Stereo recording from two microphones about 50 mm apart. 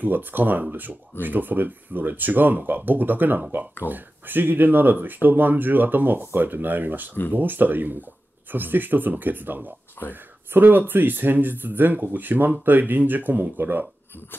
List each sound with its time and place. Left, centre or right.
0.0 s speech: right
10.0 s speech: left
10.5 s speech: right